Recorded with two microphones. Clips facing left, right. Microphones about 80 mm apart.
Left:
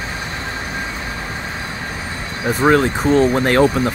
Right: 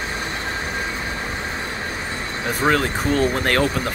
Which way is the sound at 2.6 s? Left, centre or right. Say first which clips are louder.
Left 5 dB; centre.